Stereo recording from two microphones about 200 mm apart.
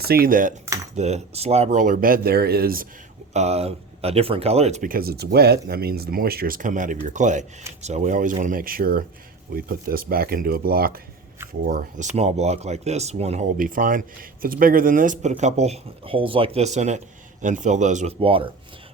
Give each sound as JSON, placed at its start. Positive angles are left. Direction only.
{"t": 0.0, "sound": "speech", "side_deg": -50}
{"t": 3.3, "sound": "speech", "side_deg": -30}